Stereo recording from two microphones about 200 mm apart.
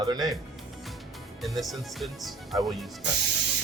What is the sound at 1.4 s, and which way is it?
Speech, centre (ahead or behind).